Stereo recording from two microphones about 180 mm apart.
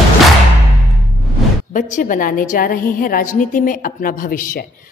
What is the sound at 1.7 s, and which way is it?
Speech, 45° left (ahead or behind).